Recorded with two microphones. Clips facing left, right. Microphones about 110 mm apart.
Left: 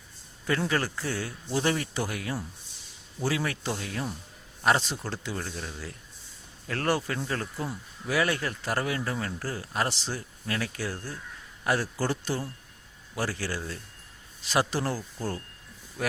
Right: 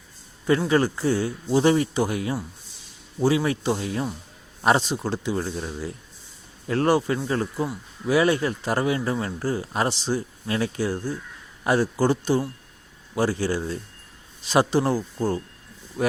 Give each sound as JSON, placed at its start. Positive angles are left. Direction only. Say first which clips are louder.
{"t": 0.7, "sound": "speech", "louder": "right 9 dB", "side_deg": -20}